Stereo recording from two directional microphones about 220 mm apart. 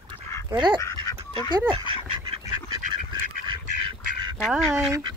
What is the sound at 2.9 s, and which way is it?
Duck, 20° right (ahead or behind).